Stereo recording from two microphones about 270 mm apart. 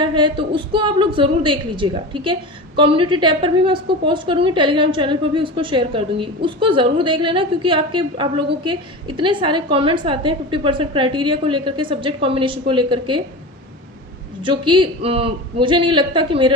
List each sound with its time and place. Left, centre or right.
0.0 s a woman's voice: centre
14.4 s a woman's voice: centre